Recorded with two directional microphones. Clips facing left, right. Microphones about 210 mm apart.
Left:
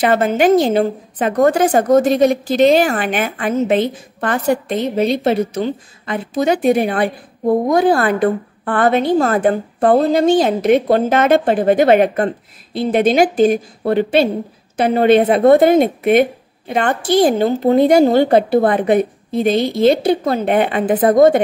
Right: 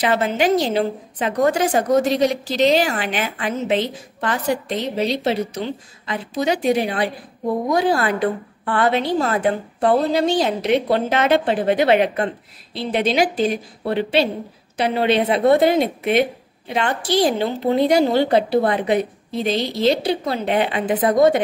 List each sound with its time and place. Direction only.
0.0 s a woman's voice: 50° left (ahead or behind)